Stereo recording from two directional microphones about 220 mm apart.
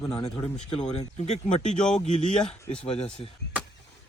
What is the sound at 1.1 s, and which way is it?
Speech, 30° left (ahead or behind).